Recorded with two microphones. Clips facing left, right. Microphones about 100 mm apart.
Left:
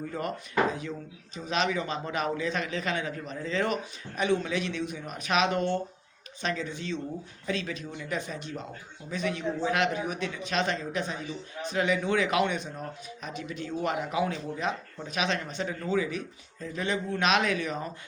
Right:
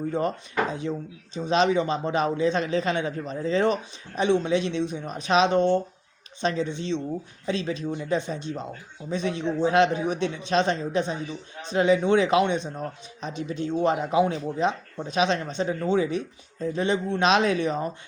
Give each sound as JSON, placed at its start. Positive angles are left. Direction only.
{"t": 0.1, "sound": "speech", "side_deg": -25}